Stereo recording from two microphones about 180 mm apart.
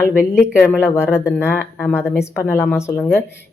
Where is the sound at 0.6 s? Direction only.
10° left (ahead or behind).